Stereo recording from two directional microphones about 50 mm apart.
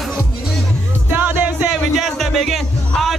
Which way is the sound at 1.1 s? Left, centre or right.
Right.